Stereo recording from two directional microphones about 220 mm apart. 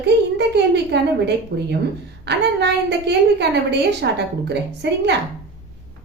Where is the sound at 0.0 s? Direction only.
50° right (ahead or behind).